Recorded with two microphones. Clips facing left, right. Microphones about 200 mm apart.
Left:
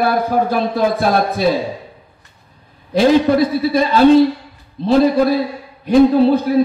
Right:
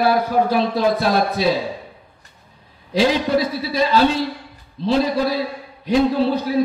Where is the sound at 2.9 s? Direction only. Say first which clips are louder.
Left 5 dB; 50° left (ahead or behind).